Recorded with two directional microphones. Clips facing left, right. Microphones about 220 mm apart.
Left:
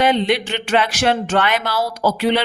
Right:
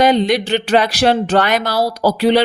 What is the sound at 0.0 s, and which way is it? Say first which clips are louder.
A woman's voice: right 3 dB; 40° right (ahead or behind).